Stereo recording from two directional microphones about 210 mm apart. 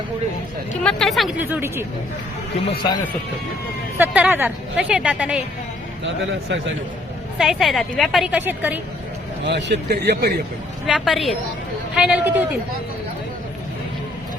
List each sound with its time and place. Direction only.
0.9 s a woman's voice: centre (ahead or behind)
2.6 s speech: 20° left (ahead or behind)
3.9 s a woman's voice: 5° right (ahead or behind)
7.3 s a woman's voice: centre (ahead or behind)
9.4 s a man's voice: 55° right (ahead or behind)
10.8 s a woman's voice: centre (ahead or behind)